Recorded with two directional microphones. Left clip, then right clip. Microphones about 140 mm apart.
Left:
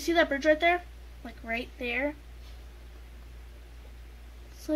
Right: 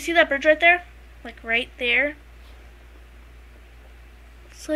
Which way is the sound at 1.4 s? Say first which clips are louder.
Right 10 dB; 10° left (ahead or behind).